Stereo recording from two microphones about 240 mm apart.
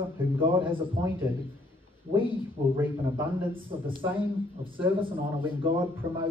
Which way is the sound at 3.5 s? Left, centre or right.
Right.